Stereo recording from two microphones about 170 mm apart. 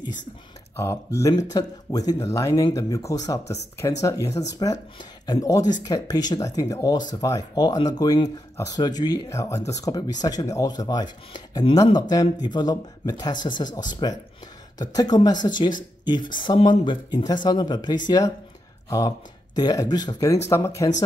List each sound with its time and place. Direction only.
0.7 s speech: 15° left (ahead or behind)